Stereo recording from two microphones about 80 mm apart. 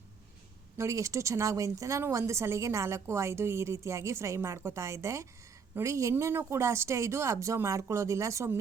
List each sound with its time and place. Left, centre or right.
0.8 s a woman's voice: right